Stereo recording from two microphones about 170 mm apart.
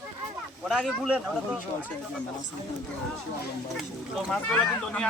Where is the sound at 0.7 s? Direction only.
Centre (ahead or behind).